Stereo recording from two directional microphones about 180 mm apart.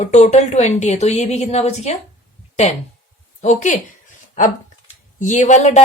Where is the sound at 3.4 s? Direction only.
40° left (ahead or behind).